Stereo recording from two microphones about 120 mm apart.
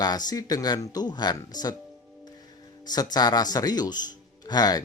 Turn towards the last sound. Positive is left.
turn(degrees=35)  # may be behind; listen again after turning